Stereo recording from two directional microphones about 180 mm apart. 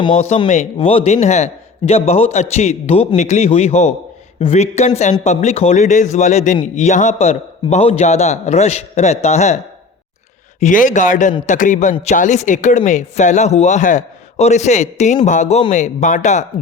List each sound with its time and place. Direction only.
0.0 s speech: 35° left (ahead or behind)
10.6 s a man's voice: 45° left (ahead or behind)